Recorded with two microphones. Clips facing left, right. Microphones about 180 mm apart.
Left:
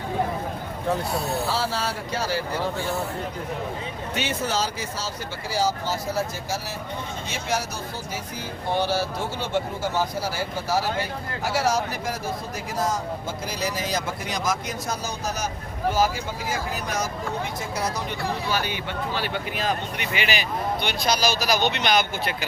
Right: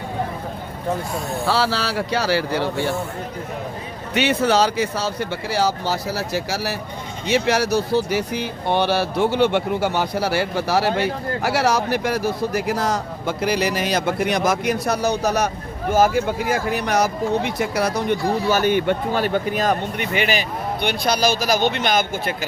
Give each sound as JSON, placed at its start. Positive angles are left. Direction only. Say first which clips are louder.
{"t": 1.5, "sound": "speech", "louder": "right 5 dB", "side_deg": -75}
{"t": 4.1, "sound": "speech", "louder": "right 9 dB", "side_deg": -70}
{"t": 18.3, "sound": "speech", "louder": "right 8 dB", "side_deg": -45}